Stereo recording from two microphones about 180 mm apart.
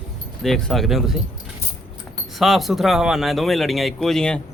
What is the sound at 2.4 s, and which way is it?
Speech, centre (ahead or behind).